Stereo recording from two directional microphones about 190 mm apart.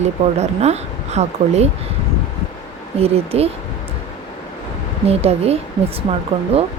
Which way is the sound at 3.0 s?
30° right (ahead or behind).